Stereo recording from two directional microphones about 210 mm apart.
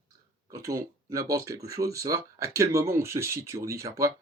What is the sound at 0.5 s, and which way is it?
Speech, 15° right (ahead or behind).